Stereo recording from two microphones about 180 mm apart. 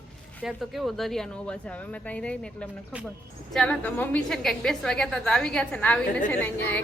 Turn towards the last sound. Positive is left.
turn(degrees=10)  # may be behind; listen again after turning